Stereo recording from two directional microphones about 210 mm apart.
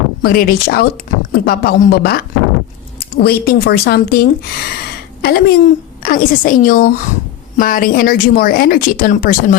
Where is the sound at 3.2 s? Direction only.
50° left (ahead or behind).